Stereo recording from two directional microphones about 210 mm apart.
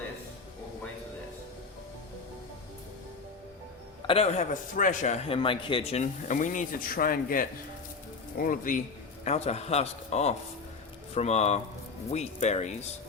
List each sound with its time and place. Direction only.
4.0 s a man's voice: 25° left (ahead or behind)